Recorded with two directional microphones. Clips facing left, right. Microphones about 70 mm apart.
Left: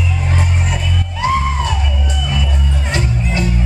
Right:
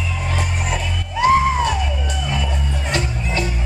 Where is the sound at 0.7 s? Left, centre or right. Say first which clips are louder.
Left 2 dB; centre.